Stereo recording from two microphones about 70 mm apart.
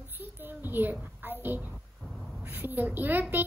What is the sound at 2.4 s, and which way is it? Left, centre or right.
A child's voice, right.